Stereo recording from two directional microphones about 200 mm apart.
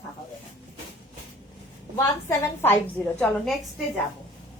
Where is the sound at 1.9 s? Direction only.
15° left (ahead or behind).